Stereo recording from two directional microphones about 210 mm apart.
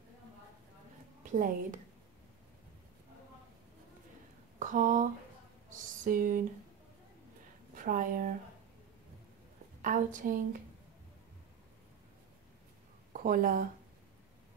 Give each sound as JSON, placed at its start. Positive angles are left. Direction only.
{"t": 1.3, "sound": "a woman's voice", "side_deg": -35}
{"t": 4.6, "sound": "a sound", "side_deg": -40}
{"t": 5.7, "sound": "speech", "side_deg": -40}
{"t": 7.7, "sound": "speech", "side_deg": -40}
{"t": 9.8, "sound": "a woman's voice", "side_deg": -40}
{"t": 13.1, "sound": "speech", "side_deg": -40}